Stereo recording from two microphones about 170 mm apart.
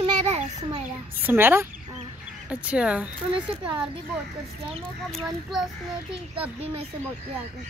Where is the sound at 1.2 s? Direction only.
10° right (ahead or behind).